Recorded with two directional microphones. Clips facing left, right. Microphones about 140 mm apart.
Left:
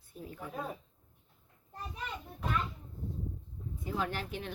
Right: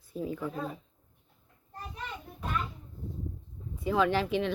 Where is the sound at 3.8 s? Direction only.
90° right.